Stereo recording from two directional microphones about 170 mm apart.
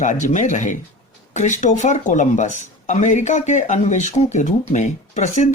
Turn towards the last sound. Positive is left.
turn(degrees=45)  # may be behind; listen again after turning